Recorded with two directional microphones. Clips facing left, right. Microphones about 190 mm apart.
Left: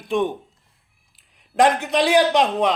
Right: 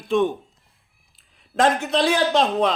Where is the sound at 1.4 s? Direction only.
15° left (ahead or behind).